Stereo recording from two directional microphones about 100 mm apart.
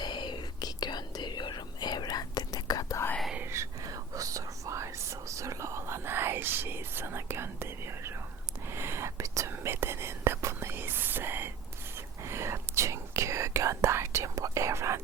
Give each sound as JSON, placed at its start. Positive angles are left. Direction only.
{"t": 0.0, "sound": "whispering", "side_deg": 50}
{"t": 3.5, "sound": "whispering", "side_deg": -30}